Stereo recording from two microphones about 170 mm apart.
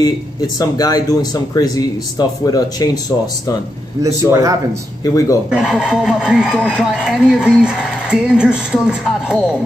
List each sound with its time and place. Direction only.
0.0 s speech: 20° left (ahead or behind)
4.0 s a man's voice: 20° right (ahead or behind)
5.0 s speech: 20° left (ahead or behind)
5.5 s speech: 5° right (ahead or behind)